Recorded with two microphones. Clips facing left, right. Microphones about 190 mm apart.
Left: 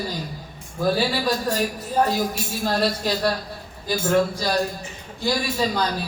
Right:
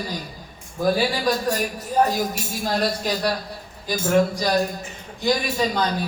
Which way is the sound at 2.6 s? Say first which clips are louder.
Left 1 dB; 15° right (ahead or behind).